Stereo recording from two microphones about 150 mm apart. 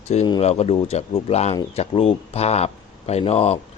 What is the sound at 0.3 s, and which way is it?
Speech, 40° left (ahead or behind).